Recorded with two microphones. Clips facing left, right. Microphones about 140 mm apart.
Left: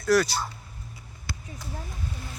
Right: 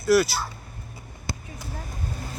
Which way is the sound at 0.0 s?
5° right (ahead or behind).